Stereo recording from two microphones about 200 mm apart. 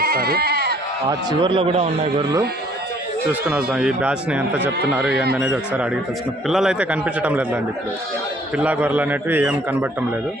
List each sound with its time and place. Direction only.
0.0 s sheep: 50° right (ahead or behind)
1.3 s a man's voice: 25° right (ahead or behind)
3.4 s a man's voice: 5° right (ahead or behind)